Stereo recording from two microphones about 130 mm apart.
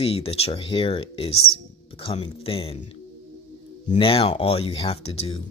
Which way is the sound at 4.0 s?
45° left (ahead or behind).